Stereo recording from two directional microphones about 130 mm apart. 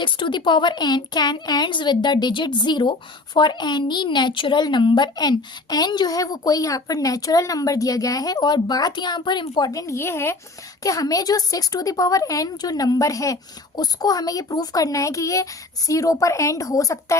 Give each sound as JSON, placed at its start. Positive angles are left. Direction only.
{"t": 0.0, "sound": "a woman's voice", "side_deg": 40}